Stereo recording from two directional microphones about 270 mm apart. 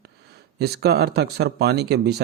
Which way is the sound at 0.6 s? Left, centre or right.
Right.